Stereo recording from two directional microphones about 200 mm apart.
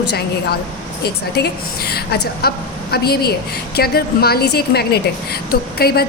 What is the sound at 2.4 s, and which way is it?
A woman's voice, 50° left (ahead or behind).